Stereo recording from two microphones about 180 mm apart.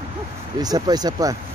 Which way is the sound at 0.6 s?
20° right (ahead or behind).